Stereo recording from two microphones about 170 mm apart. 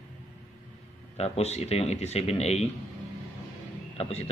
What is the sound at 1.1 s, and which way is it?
Speech, 35° left (ahead or behind).